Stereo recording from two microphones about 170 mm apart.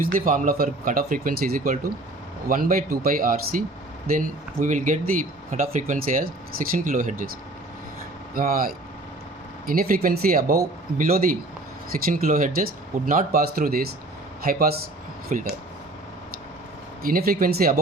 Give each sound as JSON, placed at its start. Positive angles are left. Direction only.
{"t": 0.0, "sound": "speech", "side_deg": -55}
{"t": 8.4, "sound": "speech", "side_deg": -55}
{"t": 15.3, "sound": "speech", "side_deg": -50}
{"t": 17.0, "sound": "speech", "side_deg": -60}